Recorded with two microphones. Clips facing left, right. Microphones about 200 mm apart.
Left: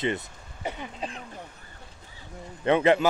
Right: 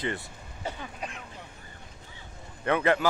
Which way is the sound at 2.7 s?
20° left (ahead or behind).